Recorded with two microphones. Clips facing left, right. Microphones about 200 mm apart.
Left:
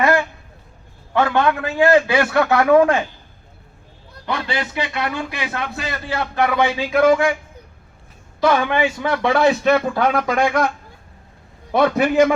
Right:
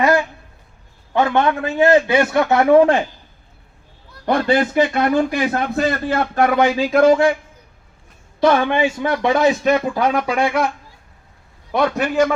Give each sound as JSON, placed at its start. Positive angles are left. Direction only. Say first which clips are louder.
{"t": 0.0, "sound": "a sound", "louder": "right 1 dB", "side_deg": -15}
{"t": 1.1, "sound": "a man's voice", "louder": "right 1 dB", "side_deg": -20}
{"t": 4.3, "sound": "speech", "louder": "right 8 dB", "side_deg": -50}
{"t": 8.4, "sound": "a man's voice", "louder": "right 2 dB", "side_deg": -25}
{"t": 11.7, "sound": "a man's voice", "louder": "left 2 dB", "side_deg": 5}